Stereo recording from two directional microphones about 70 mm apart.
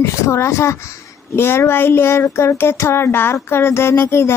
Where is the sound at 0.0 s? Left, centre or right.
Left.